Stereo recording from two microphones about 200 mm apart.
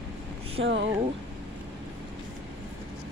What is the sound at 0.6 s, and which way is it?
Speech, 55° right (ahead or behind).